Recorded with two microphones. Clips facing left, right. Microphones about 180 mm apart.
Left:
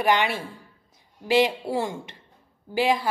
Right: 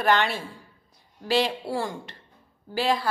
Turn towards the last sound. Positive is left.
turn(degrees=15)  # may be behind; listen again after turning